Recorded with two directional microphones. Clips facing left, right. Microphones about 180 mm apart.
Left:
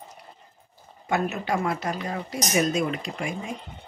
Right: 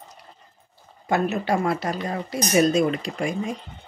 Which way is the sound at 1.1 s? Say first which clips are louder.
Right 3 dB; 35° right (ahead or behind).